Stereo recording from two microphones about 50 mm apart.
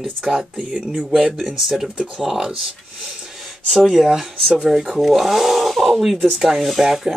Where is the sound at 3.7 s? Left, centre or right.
Centre.